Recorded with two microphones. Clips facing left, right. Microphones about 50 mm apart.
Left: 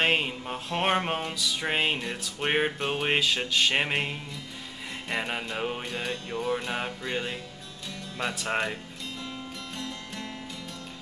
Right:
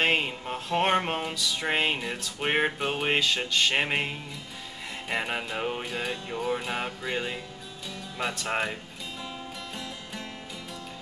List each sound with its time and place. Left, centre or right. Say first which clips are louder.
0.0 s music: even; centre